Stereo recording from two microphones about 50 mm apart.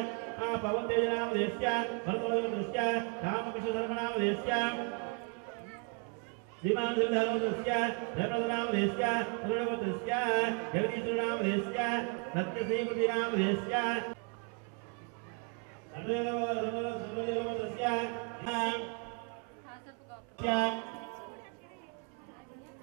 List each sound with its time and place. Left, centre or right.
0.0 s music: centre
6.6 s a man's voice: centre
16.0 s music: centre
20.3 s speech: centre